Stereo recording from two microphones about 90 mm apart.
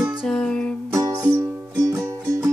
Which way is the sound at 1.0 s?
45° right (ahead or behind).